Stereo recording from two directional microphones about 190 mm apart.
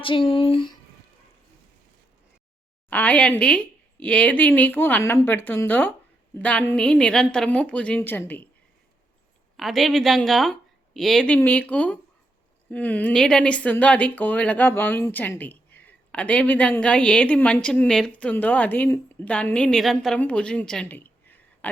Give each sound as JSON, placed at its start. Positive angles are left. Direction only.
{"t": 0.0, "sound": "speech", "side_deg": 25}
{"t": 2.9, "sound": "speech", "side_deg": 10}
{"t": 9.6, "sound": "speech", "side_deg": 0}